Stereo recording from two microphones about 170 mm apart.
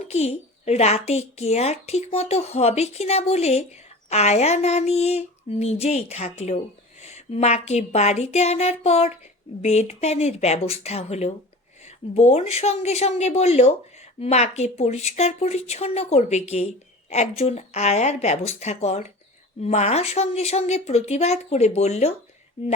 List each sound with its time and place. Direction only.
0.1 s speech: 40° left (ahead or behind)